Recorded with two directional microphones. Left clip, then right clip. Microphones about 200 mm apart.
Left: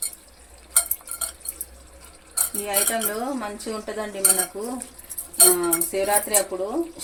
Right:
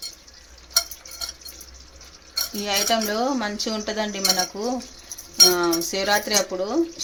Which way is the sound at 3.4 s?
50° right (ahead or behind).